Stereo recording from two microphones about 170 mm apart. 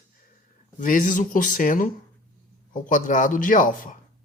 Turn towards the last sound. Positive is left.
turn(degrees=50)  # may be behind; listen again after turning